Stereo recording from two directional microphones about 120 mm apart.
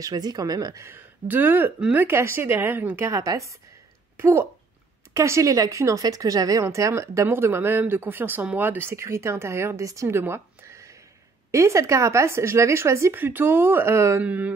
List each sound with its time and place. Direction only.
0.0 s speech: 35° right (ahead or behind)
0.8 s speech: 15° right (ahead or behind)
14.2 s mantra: 10° right (ahead or behind)